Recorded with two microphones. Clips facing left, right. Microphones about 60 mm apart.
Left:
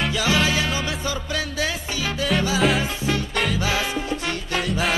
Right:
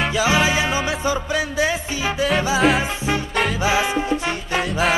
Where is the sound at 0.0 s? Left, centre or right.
Centre.